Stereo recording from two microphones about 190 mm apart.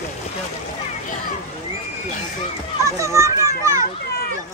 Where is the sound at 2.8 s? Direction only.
15° right (ahead or behind).